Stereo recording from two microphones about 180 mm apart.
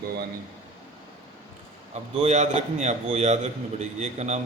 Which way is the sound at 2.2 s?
40° right (ahead or behind).